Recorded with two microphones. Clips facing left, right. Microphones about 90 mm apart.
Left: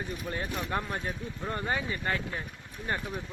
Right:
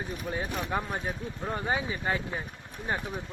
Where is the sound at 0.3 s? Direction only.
10° right (ahead or behind).